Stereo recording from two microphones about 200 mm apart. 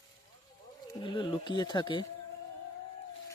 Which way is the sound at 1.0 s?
25° left (ahead or behind).